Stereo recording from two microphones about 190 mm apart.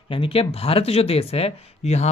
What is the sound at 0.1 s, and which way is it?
Speech, 30° left (ahead or behind).